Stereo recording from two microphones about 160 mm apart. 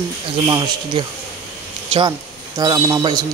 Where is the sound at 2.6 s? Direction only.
25° right (ahead or behind).